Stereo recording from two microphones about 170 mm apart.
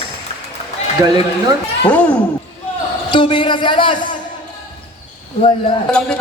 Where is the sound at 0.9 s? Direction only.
25° right (ahead or behind).